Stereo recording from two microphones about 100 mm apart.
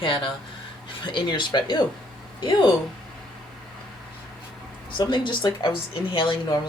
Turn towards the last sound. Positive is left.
turn(degrees=55)  # may be behind; listen again after turning